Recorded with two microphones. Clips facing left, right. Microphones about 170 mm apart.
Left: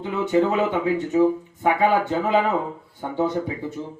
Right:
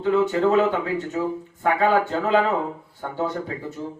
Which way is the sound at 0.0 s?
15° left (ahead or behind).